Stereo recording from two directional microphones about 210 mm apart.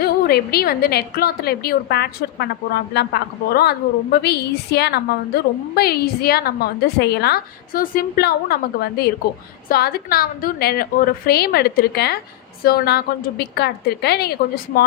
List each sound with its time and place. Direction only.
0.0 s a woman's voice: 50° left (ahead or behind)